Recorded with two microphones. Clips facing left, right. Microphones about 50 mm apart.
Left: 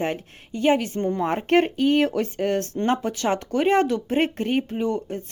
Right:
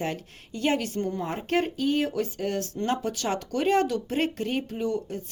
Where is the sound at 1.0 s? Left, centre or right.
Left.